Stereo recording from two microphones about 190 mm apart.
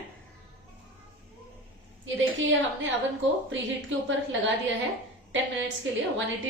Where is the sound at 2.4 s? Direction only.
80° right.